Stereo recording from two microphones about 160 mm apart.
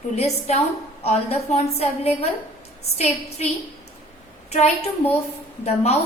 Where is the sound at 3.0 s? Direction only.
40° left (ahead or behind).